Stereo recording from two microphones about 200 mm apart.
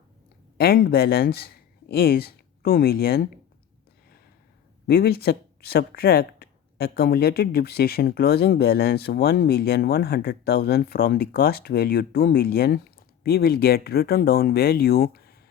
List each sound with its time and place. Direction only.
0.5 s speech: 50° left (ahead or behind)
4.9 s speech: 50° left (ahead or behind)